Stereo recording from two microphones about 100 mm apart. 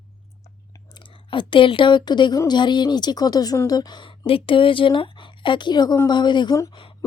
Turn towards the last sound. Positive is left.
turn(degrees=50)  # may be behind; listen again after turning